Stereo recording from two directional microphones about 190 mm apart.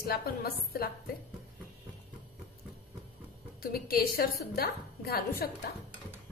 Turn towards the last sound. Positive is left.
turn(degrees=55)  # may be behind; listen again after turning